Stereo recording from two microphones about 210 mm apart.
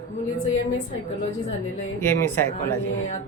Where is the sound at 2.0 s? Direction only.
10° left (ahead or behind).